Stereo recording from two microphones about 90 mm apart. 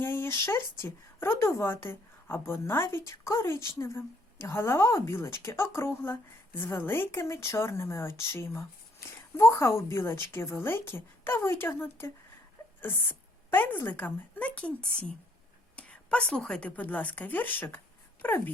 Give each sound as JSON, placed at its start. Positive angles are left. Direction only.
{"t": 0.0, "sound": "a woman's voice", "side_deg": 25}